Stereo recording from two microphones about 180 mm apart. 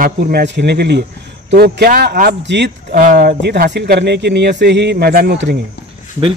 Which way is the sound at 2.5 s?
75° right (ahead or behind).